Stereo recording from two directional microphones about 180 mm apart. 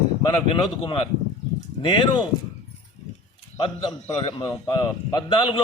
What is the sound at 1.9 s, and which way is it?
Speech, 30° left (ahead or behind).